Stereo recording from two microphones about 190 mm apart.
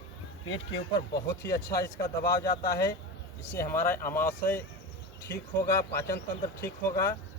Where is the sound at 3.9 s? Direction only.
10° left (ahead or behind).